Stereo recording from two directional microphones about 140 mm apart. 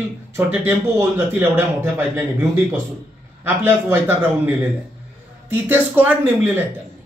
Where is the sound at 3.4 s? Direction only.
15° right (ahead or behind).